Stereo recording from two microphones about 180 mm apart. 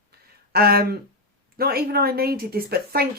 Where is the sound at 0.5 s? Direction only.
60° right (ahead or behind).